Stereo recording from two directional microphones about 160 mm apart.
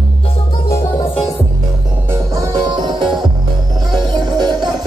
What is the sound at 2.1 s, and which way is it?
Music, 25° right (ahead or behind).